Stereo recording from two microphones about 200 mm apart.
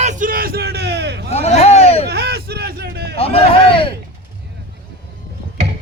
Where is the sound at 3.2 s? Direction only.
30° left (ahead or behind).